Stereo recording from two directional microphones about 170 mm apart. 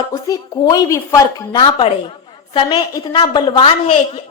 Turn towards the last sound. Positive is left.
turn(degrees=35)  # may be behind; listen again after turning